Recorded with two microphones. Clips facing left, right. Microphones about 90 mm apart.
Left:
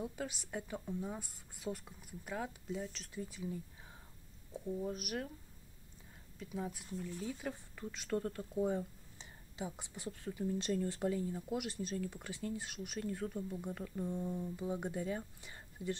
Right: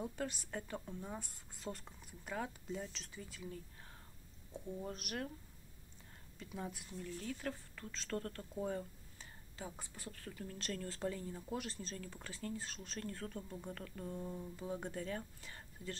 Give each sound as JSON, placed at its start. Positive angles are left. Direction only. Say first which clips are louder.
{"t": 0.0, "sound": "a woman's voice", "louder": "even", "side_deg": 5}
{"t": 4.7, "sound": "a woman's voice", "louder": "left 3 dB", "side_deg": 5}
{"t": 6.3, "sound": "a woman's voice", "louder": "left 4 dB", "side_deg": 0}